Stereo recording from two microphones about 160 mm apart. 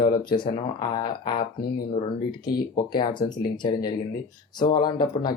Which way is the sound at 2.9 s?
30° left (ahead or behind).